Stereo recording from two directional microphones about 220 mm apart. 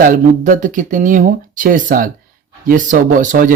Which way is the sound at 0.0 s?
35° right (ahead or behind).